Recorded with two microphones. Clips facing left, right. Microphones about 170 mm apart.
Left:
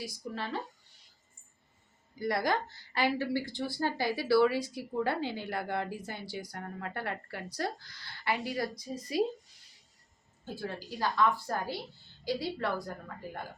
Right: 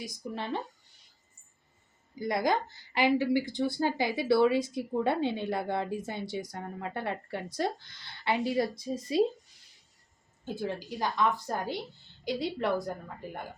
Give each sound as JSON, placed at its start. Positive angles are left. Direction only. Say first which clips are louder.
{"t": 0.0, "sound": "speech", "louder": "right 1 dB", "side_deg": -20}
{"t": 2.1, "sound": "speech", "louder": "right 2 dB", "side_deg": -20}
{"t": 10.4, "sound": "speech", "louder": "right 4 dB", "side_deg": -20}